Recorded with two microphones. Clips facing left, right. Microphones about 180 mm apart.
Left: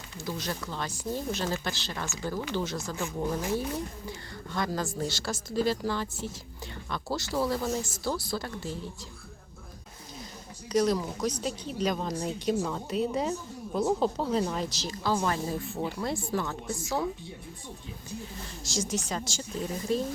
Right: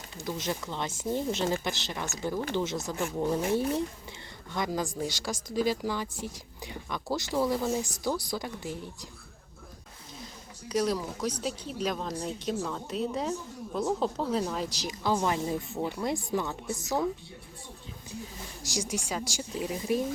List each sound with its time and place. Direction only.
0.2 s speech: 20° right (ahead or behind)
3.0 s speech: 10° right (ahead or behind)
3.5 s speech: 25° right (ahead or behind)
10.7 s speech: 5° right (ahead or behind)
14.8 s speech: 15° right (ahead or behind)
18.7 s speech: 15° right (ahead or behind)